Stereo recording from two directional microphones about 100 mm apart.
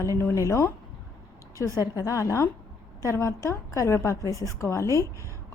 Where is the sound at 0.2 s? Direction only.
25° left (ahead or behind).